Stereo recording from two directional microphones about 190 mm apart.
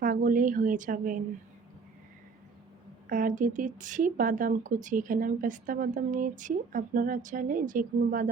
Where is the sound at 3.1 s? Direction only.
45° right (ahead or behind).